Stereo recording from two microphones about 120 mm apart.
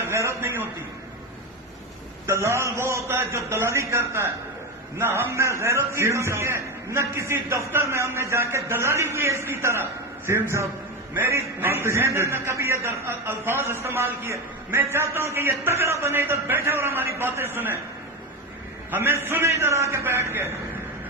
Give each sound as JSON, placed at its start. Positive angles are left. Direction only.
{"t": 0.0, "sound": "a man's voice", "side_deg": -25}
{"t": 2.2, "sound": "a man's voice", "side_deg": -25}
{"t": 18.9, "sound": "a man's voice", "side_deg": -20}